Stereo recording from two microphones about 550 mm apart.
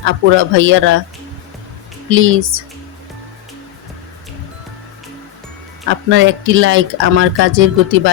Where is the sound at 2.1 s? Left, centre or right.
Right.